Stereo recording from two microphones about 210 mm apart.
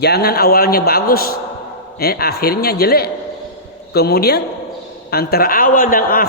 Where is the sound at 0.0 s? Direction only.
50° left (ahead or behind).